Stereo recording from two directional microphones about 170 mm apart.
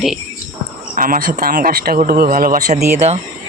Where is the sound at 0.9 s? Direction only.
55° right (ahead or behind).